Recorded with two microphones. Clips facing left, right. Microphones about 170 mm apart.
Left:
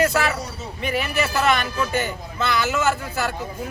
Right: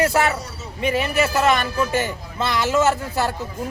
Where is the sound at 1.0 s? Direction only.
25° right (ahead or behind).